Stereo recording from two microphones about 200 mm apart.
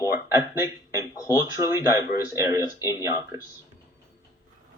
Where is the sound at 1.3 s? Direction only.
15° right (ahead or behind).